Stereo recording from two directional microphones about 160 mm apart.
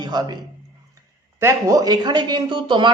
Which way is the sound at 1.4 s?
20° right (ahead or behind).